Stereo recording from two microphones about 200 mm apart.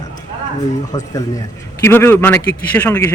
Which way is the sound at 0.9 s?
15° left (ahead or behind).